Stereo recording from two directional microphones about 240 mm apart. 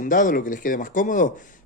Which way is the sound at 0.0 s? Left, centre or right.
Left.